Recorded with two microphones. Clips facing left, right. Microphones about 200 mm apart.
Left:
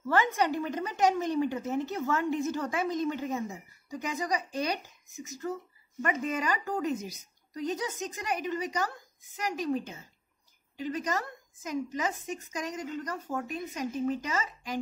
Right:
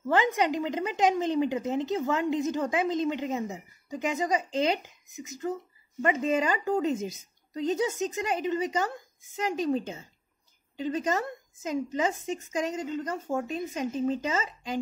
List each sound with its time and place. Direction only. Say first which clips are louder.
0.0 s a woman's voice: right 2 dB; 20° right (ahead or behind)